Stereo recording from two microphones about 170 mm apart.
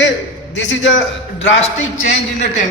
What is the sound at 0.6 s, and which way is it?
Speech, 90° left.